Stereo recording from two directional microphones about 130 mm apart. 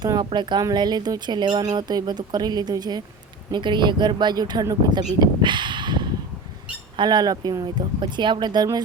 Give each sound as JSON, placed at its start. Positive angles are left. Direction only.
{"t": 0.0, "sound": "speech", "side_deg": -35}
{"t": 5.2, "sound": "a sound", "side_deg": -35}
{"t": 6.9, "sound": "speech", "side_deg": -35}